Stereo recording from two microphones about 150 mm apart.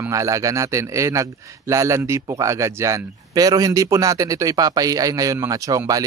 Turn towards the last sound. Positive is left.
turn(degrees=-25)  # may be behind; listen again after turning